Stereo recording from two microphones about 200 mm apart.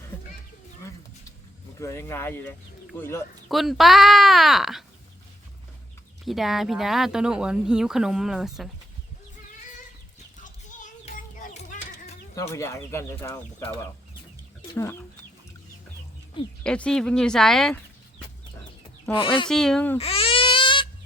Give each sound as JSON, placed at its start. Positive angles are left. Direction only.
{"t": 1.8, "sound": "speech", "side_deg": 15}
{"t": 3.5, "sound": "speech", "side_deg": 0}
{"t": 6.2, "sound": "speech", "side_deg": 0}
{"t": 10.4, "sound": "children playing", "side_deg": 40}
{"t": 12.4, "sound": "speech", "side_deg": 15}
{"t": 16.6, "sound": "speech", "side_deg": 5}
{"t": 19.1, "sound": "speech", "side_deg": 25}
{"t": 19.5, "sound": "speech", "side_deg": 5}
{"t": 20.0, "sound": "a sound", "side_deg": 30}